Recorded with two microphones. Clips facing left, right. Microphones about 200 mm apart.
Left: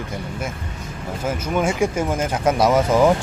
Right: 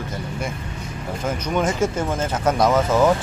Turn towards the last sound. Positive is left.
turn(degrees=15)  # may be behind; listen again after turning